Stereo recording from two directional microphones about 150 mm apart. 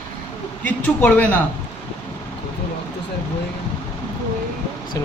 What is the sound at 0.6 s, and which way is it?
Speech, 10° left (ahead or behind).